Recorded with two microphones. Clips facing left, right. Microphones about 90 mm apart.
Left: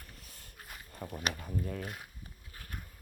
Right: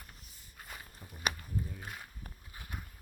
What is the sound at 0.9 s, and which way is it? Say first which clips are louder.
Speech: left 1 dB; 75° left (ahead or behind).